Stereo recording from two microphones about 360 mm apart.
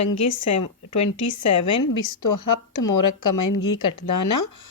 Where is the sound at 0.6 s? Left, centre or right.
Left.